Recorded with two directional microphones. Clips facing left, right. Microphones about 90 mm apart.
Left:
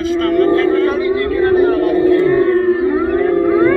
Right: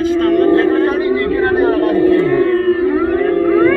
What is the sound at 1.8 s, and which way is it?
Whale vocalization, 10° left (ahead or behind).